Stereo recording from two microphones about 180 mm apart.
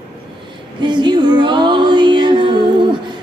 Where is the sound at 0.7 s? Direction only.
25° right (ahead or behind).